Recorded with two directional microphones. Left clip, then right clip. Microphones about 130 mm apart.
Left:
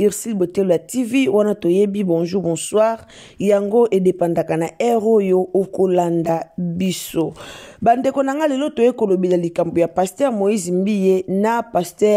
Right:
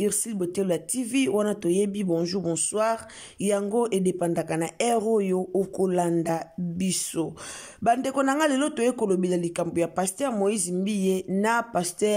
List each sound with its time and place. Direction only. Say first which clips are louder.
0.0 s a man's voice: left 9 dB; 30° left (ahead or behind)